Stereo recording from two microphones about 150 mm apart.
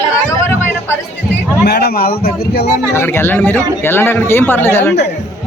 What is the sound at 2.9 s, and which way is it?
Speech, 15° left (ahead or behind).